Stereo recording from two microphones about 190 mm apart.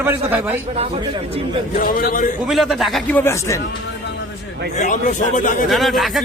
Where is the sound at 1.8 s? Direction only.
50° left (ahead or behind).